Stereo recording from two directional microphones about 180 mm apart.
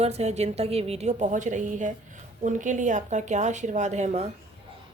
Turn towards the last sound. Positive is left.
turn(degrees=-40)  # may be behind; listen again after turning